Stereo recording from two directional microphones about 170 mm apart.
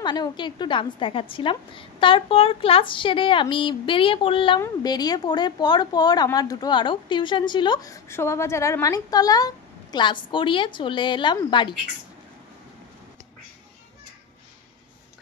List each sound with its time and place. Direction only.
0.0 s a woman's voice: 25° left (ahead or behind)